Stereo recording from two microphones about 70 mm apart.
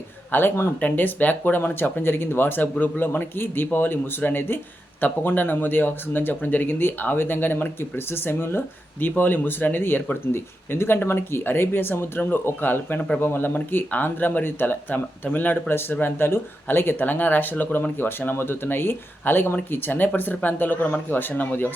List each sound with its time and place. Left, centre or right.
0.3 s speech: left